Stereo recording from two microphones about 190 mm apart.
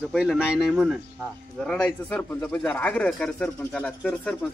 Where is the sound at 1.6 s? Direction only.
5° left (ahead or behind).